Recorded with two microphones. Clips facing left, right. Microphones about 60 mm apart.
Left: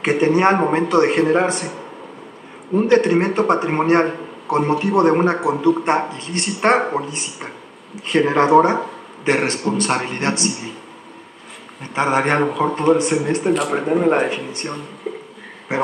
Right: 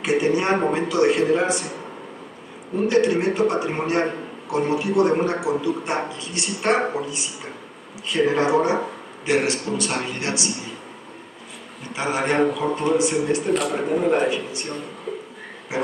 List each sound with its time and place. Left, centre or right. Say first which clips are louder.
0.0 s a man's voice: left 5 dB; left
2.9 s a man's voice: left 3 dB; left
11.9 s a man's voice: left 5 dB; left